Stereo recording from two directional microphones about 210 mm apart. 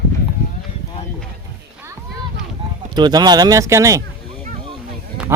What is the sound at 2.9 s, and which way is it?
Speech, 20° right (ahead or behind).